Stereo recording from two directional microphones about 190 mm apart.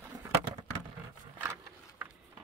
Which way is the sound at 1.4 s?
10° right (ahead or behind).